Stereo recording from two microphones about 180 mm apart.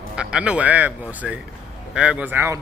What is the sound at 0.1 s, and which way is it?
A man's voice, 5° right (ahead or behind).